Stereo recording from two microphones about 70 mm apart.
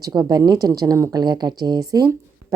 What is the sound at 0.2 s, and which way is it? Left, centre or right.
Speech, right.